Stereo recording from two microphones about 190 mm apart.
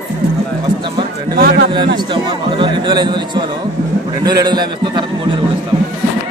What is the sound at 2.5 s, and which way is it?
A man's voice, 25° right (ahead or behind).